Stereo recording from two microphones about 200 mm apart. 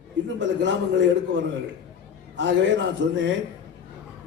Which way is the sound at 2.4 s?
65° right (ahead or behind).